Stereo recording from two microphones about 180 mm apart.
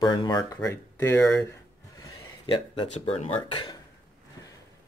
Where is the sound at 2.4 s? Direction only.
30° left (ahead or behind).